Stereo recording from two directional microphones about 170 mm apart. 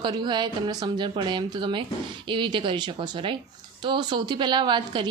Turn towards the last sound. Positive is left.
turn(degrees=-25)  # may be behind; listen again after turning